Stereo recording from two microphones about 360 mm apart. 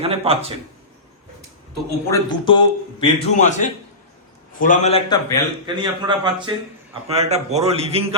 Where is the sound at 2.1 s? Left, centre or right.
Centre.